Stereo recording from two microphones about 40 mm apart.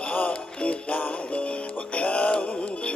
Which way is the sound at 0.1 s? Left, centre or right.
Left.